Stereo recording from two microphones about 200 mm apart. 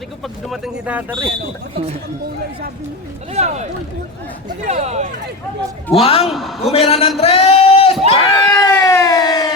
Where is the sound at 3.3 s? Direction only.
35° right (ahead or behind).